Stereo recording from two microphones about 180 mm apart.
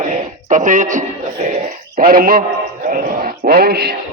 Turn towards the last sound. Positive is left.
turn(degrees=-55)  # may be behind; listen again after turning